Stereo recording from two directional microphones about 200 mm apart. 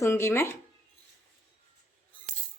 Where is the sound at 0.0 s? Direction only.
15° left (ahead or behind).